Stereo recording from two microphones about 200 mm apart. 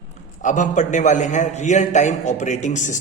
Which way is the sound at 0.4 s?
40° left (ahead or behind).